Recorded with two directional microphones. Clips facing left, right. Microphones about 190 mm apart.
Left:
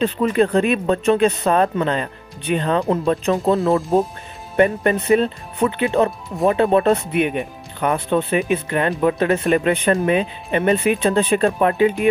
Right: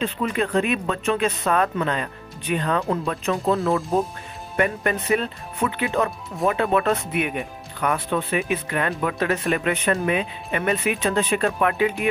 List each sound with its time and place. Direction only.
0.0 s speech: 35° left (ahead or behind)
3.5 s speech: centre (ahead or behind)
4.6 s speech: 30° left (ahead or behind)